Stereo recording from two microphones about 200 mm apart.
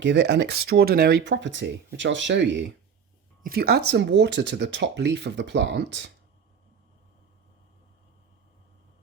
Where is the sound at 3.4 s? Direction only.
50° right (ahead or behind).